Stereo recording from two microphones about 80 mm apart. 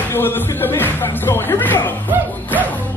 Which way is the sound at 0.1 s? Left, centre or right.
Left.